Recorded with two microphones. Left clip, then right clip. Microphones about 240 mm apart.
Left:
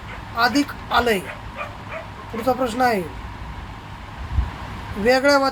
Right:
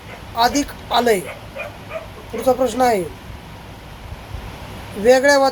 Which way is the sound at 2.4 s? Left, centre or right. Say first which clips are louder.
Right 4 dB; centre.